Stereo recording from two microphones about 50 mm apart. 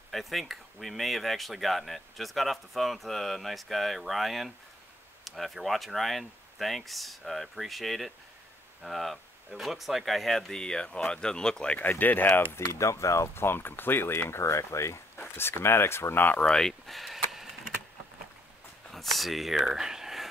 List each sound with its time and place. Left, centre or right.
0.1 s speech: centre
11.8 s speech: left
12.5 s speech: left
13.3 s speech: left
14.3 s speech: left
15.1 s speech: left
16.4 s speech: centre
16.8 s a sound: centre
18.9 s speech: centre